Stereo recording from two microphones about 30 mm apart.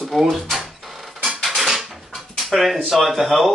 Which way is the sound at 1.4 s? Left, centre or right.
Centre.